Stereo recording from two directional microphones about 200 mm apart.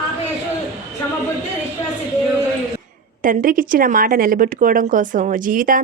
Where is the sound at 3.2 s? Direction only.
45° right (ahead or behind).